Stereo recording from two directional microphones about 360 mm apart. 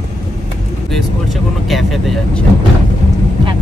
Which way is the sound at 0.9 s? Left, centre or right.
Centre.